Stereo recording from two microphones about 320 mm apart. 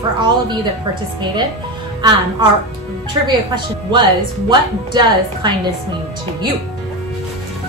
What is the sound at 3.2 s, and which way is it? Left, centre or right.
A woman's voice, centre.